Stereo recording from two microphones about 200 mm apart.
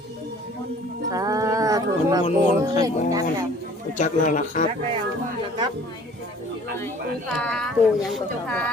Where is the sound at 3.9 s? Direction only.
40° left (ahead or behind).